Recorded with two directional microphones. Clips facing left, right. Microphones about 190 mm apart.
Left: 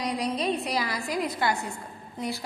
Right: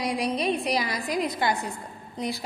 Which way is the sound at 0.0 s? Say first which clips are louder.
Right 2 dB; 10° right (ahead or behind).